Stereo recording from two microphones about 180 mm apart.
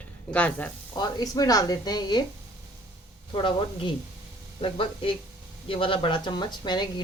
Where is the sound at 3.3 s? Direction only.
30° left (ahead or behind).